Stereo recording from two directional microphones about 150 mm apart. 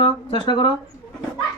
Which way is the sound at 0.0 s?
30° left (ahead or behind).